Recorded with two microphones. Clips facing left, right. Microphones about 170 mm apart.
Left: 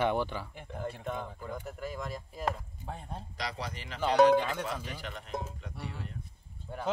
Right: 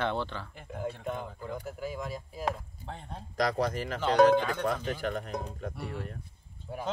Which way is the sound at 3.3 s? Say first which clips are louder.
Right 12 dB; 50° right (ahead or behind).